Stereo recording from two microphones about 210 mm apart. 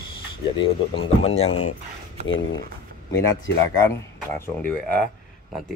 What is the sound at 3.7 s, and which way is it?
Speech, 10° left (ahead or behind).